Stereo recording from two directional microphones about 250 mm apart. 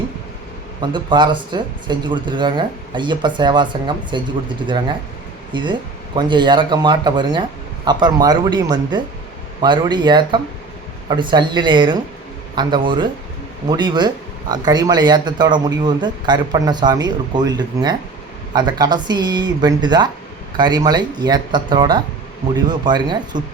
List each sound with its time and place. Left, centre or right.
0.8 s speech: centre